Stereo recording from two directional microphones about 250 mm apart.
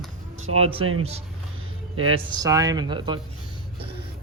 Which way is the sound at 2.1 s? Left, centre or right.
Centre.